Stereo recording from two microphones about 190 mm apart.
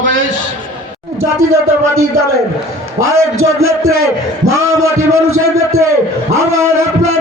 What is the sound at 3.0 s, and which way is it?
A man's voice, 90° right.